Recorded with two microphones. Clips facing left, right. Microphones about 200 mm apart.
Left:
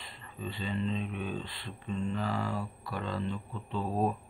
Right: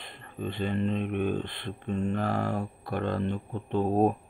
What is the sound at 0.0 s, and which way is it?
Speech, 55° right (ahead or behind).